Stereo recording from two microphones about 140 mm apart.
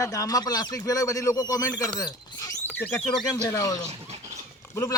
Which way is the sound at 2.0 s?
25° left (ahead or behind).